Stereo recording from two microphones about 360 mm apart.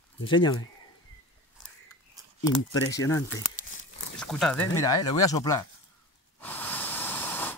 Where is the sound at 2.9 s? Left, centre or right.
Centre.